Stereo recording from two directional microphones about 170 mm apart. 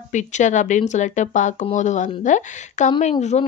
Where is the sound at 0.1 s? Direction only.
45° left (ahead or behind).